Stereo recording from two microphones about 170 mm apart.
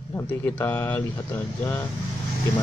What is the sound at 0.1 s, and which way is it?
Speech, 15° left (ahead or behind).